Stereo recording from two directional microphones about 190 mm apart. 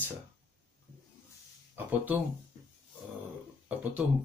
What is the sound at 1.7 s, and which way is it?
Speech, 10° right (ahead or behind).